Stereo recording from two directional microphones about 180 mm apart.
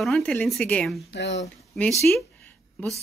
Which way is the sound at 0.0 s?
Centre (ahead or behind).